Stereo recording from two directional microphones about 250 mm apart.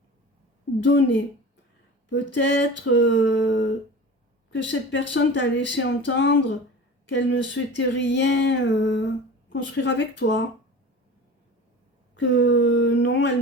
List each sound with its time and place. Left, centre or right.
0.8 s speech: left
12.1 s speech: left